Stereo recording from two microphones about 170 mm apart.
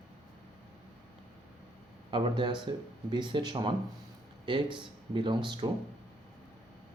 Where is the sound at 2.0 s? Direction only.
30° right (ahead or behind).